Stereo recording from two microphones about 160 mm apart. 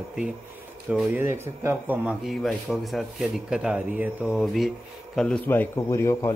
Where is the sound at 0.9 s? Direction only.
15° right (ahead or behind); by 6.3 s 15° left (ahead or behind).